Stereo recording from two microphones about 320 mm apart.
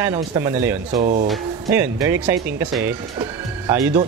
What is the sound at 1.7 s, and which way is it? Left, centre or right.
Speech, centre.